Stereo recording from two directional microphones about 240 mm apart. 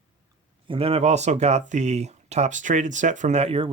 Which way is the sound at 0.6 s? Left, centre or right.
Right.